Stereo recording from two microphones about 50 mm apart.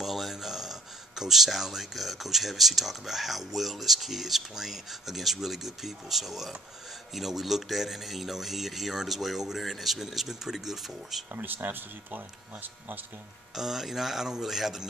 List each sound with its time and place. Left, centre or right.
0.0 s speech: centre
11.3 s speech: right
13.6 s speech: centre